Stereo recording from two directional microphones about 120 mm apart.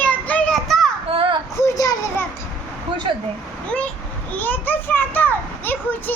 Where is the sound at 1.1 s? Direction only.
45° right (ahead or behind).